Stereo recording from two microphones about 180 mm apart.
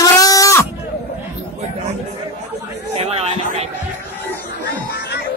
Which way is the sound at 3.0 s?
35° right (ahead or behind).